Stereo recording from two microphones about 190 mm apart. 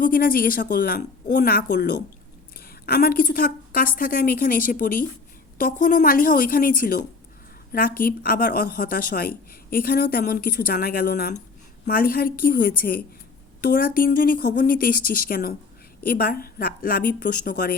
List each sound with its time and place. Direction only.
0.0 s a woman's voice: 50° left (ahead or behind)